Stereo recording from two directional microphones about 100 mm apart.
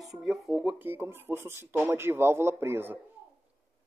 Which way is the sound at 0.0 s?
5° right (ahead or behind).